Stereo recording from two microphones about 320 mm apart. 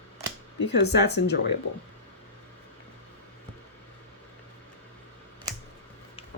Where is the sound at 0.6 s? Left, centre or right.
Left.